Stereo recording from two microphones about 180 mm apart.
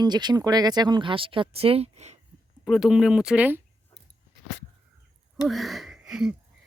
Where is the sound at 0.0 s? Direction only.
25° right (ahead or behind).